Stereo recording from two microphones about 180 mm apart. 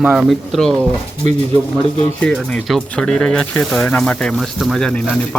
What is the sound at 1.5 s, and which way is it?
Speech, 30° left (ahead or behind).